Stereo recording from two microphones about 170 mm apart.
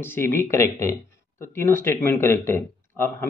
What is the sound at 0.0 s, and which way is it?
A man's voice, 15° left (ahead or behind).